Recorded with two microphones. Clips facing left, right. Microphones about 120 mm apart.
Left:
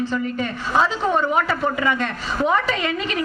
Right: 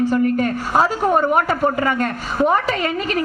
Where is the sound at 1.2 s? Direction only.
45° right (ahead or behind).